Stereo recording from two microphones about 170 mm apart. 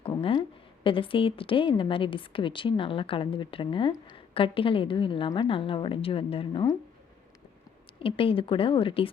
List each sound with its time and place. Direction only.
0.0 s a sound: 35° left (ahead or behind)
0.9 s a woman's voice: 30° left (ahead or behind)
7.9 s a woman's voice: 30° left (ahead or behind)